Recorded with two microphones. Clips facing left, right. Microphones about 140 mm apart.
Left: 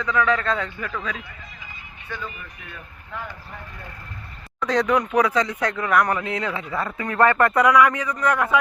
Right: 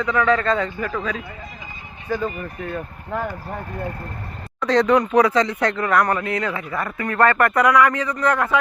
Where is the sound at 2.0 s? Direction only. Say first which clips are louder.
Right 10 dB; 40° right (ahead or behind).